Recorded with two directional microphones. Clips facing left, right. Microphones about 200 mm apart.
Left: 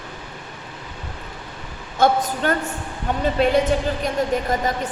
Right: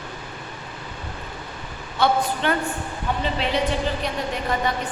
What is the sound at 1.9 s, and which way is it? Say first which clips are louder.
A woman's voice: left 2 dB; 45° left (ahead or behind).